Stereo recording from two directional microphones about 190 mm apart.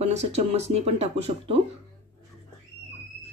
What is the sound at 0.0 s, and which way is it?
Speech, 35° right (ahead or behind).